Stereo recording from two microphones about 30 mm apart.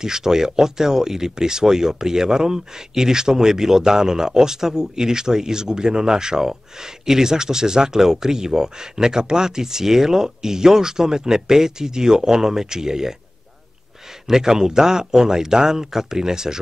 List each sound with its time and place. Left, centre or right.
0.0 s speech: centre
14.2 s speech: centre